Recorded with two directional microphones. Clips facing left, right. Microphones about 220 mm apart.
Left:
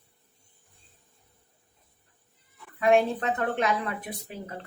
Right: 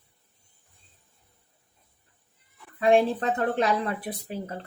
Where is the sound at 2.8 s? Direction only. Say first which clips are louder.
Right 1 dB; 30° right (ahead or behind).